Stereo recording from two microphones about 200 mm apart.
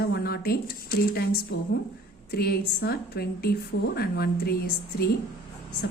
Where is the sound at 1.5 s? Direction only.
60° left (ahead or behind).